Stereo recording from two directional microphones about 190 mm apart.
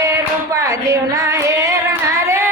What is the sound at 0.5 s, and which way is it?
Female singing, 15° right (ahead or behind).